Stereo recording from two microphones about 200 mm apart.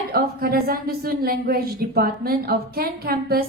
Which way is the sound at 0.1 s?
50° right (ahead or behind).